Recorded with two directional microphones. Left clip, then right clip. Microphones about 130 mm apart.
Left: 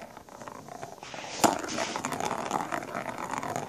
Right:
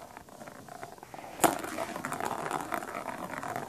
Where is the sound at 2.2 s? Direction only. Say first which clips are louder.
Left 2 dB; 10° left (ahead or behind).